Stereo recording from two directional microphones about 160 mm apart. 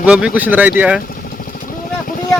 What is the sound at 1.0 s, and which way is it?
Vehicle, 65° left (ahead or behind).